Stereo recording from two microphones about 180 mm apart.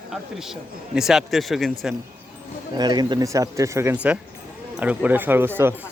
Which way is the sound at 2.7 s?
25° right (ahead or behind).